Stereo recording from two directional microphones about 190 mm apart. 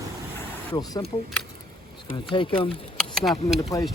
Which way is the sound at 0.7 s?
25° left (ahead or behind).